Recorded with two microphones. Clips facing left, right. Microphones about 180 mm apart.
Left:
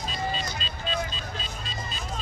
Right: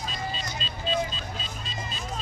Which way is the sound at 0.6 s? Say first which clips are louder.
Even; 30° right (ahead or behind).